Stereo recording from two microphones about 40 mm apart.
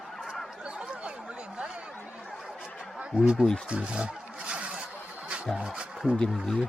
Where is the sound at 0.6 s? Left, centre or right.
Right.